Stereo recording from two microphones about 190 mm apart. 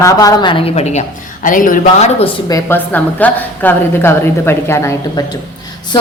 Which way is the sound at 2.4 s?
15° left (ahead or behind).